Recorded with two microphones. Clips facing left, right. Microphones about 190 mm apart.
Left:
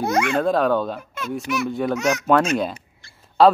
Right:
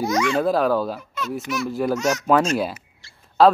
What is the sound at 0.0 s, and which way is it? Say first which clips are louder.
Speech: even; 60° left (ahead or behind).